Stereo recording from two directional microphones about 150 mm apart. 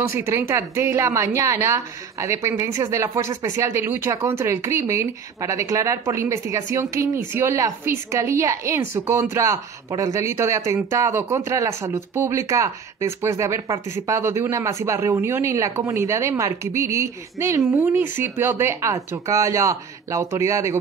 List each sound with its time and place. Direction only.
0.1 s a woman's voice: 20° right (ahead or behind)